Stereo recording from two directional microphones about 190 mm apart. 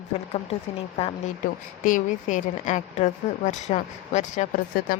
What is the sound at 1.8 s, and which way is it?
A woman's voice, 45° left (ahead or behind).